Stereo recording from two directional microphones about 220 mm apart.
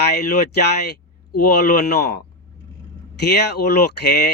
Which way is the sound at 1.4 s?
45° left (ahead or behind).